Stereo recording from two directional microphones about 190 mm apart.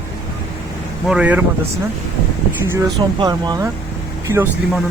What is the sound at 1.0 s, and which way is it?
Speech, 5° right (ahead or behind).